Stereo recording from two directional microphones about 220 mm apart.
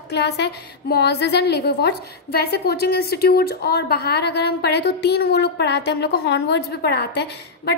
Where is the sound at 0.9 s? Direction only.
45° left (ahead or behind).